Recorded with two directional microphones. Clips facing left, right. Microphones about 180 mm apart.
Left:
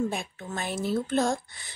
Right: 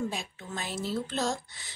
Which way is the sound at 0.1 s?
55° left (ahead or behind).